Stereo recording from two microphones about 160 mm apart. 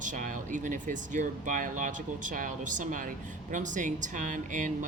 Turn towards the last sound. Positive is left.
turn(degrees=-55)  # may be behind; listen again after turning